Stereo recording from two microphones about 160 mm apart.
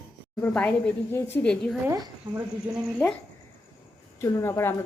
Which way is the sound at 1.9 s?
20° right (ahead or behind).